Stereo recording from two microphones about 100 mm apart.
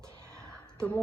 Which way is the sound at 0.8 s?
10° left (ahead or behind).